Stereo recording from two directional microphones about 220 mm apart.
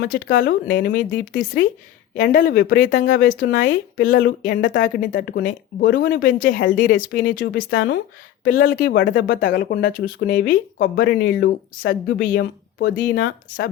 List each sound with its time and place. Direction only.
0.0 s speech: 55° left (ahead or behind)
0.9 s speech: 40° left (ahead or behind)
8.4 s speech: 40° left (ahead or behind)
8.9 s speech: 55° left (ahead or behind)